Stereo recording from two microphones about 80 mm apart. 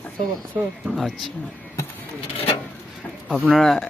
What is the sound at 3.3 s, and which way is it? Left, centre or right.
Speech, centre.